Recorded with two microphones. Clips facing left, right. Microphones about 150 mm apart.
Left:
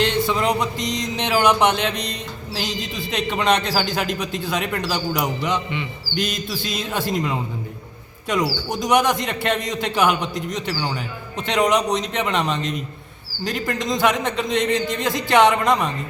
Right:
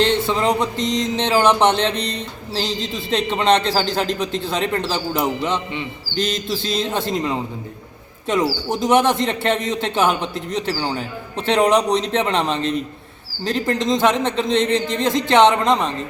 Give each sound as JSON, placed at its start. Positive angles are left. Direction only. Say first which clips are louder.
{"t": 0.0, "sound": "a man's voice", "louder": "right 2 dB", "side_deg": -25}
{"t": 8.7, "sound": "a man's voice", "louder": "right 2 dB", "side_deg": -25}